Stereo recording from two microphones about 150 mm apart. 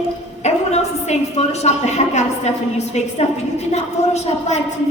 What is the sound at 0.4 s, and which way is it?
A woman's voice, 45° left (ahead or behind).